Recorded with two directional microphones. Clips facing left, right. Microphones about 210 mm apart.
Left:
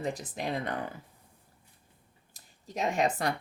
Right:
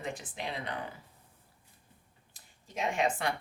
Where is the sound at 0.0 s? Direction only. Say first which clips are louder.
Left 5 dB; 40° left (ahead or behind).